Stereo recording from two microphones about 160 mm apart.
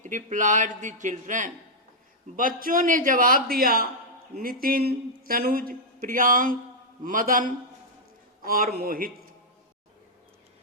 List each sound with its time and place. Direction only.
0.0 s a man's voice: 50° right (ahead or behind)